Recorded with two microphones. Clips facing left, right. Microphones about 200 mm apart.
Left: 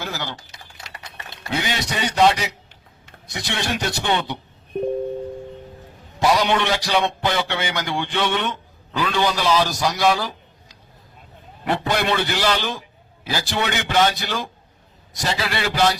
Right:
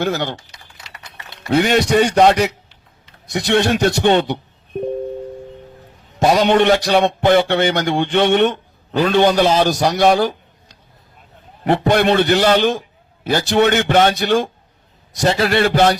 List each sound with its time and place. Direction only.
0.0 s a man's voice: 65° right (ahead or behind)
1.5 s a man's voice: 60° right (ahead or behind)
3.3 s a man's voice: 70° right (ahead or behind)
6.1 s a man's voice: 40° right (ahead or behind)
11.7 s a man's voice: 50° right (ahead or behind)
15.2 s speech: 45° right (ahead or behind)